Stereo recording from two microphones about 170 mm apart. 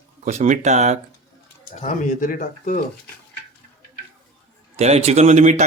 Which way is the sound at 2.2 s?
55° left (ahead or behind).